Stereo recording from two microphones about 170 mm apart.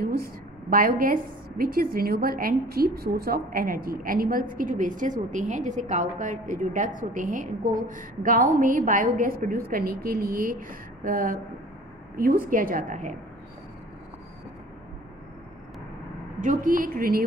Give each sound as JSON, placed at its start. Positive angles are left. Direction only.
{"t": 0.0, "sound": "a woman's voice", "side_deg": -60}
{"t": 16.3, "sound": "a woman's voice", "side_deg": -50}